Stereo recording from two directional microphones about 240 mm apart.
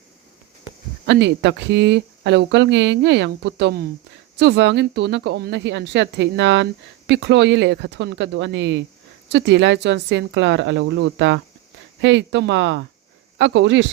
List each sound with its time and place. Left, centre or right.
1.0 s speech: right